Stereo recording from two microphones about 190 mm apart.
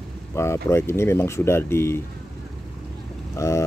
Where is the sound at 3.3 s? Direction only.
15° left (ahead or behind).